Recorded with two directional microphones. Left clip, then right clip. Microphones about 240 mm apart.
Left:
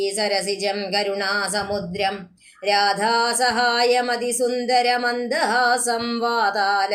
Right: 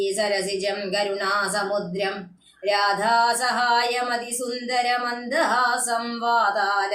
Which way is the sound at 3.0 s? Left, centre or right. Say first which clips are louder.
Left 1 dB; left.